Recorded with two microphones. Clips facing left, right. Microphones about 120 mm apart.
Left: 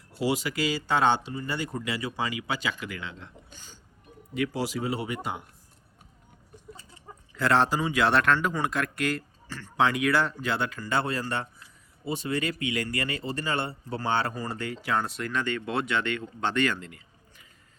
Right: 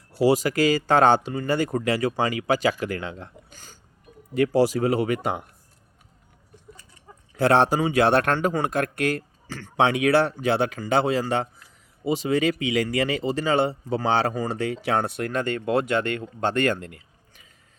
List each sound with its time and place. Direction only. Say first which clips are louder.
0.2 s speech: right 8 dB; 40° right (ahead or behind); by 5.5 s 60° right (ahead or behind)
7.3 s speech: right 5 dB; 60° right (ahead or behind)